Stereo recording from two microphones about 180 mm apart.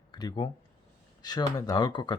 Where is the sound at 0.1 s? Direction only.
25° left (ahead or behind).